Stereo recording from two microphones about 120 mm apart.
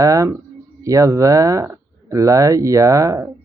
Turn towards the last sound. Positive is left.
turn(degrees=-25)  # may be behind; listen again after turning